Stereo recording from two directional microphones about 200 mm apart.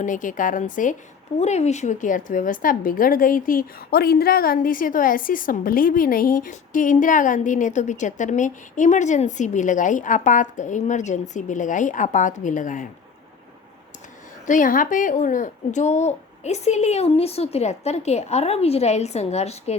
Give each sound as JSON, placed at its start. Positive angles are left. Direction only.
{"t": 0.0, "sound": "a woman's voice", "side_deg": 40}
{"t": 14.4, "sound": "a woman's voice", "side_deg": 40}